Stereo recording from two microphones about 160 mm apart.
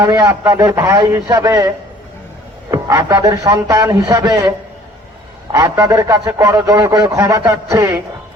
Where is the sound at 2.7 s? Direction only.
20° right (ahead or behind).